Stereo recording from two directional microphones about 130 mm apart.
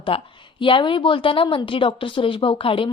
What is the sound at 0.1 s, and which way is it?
A woman's voice, 45° left (ahead or behind).